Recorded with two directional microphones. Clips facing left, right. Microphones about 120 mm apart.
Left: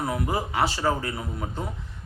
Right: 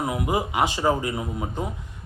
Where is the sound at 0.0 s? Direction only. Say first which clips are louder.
Right 2 dB; 15° right (ahead or behind).